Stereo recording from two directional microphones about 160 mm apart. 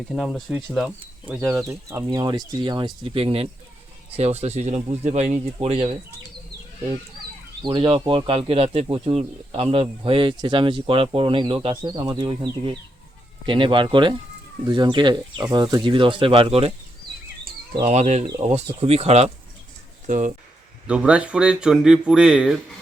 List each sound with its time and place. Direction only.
0.1 s speech: centre (ahead or behind); by 2.0 s 15° right (ahead or behind)
2.0 s speech: 30° right (ahead or behind)
7.6 s speech: 30° right (ahead or behind)
17.8 s speech: 45° right (ahead or behind)
20.1 s speech: 55° right (ahead or behind)
20.8 s speech: 5° right (ahead or behind)